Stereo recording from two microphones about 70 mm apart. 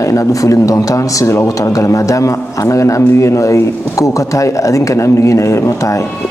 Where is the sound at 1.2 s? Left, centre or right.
Left.